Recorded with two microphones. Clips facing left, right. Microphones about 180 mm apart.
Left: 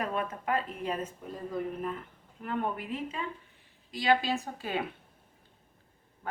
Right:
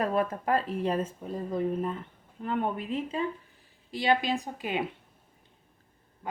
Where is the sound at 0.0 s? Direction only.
35° right (ahead or behind).